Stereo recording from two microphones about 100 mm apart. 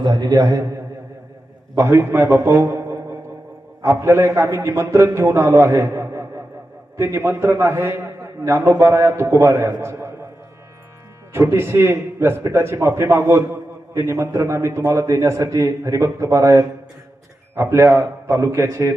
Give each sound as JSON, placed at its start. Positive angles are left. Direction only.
{"t": 0.0, "sound": "a man's voice", "side_deg": -45}
{"t": 1.7, "sound": "a man's voice", "side_deg": -25}
{"t": 11.3, "sound": "a man's voice", "side_deg": -25}